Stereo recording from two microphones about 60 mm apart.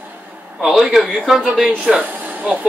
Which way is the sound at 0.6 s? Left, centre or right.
Centre.